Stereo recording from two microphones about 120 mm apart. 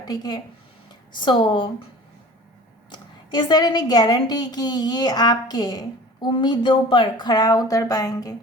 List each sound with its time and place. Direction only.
0.0 s a woman's voice: 35° left (ahead or behind)
2.9 s a woman's voice: 35° left (ahead or behind)